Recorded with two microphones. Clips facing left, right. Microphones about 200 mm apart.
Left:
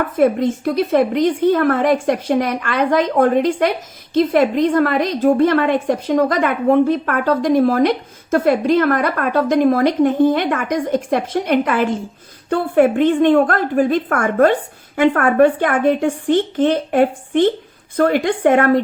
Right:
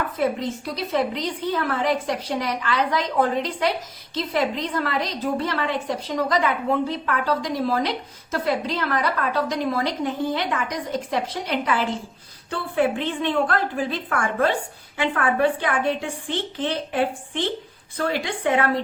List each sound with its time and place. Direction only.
0.0 s a woman's voice: 50° left (ahead or behind)